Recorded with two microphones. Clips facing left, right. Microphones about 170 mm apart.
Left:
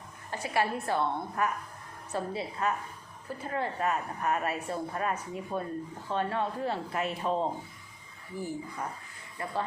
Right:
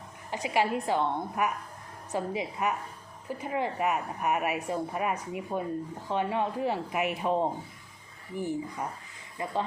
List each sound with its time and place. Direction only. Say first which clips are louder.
0.3 s a woman's voice: right 2 dB; 15° right (ahead or behind)